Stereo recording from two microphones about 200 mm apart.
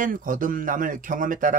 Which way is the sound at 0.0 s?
45° right (ahead or behind).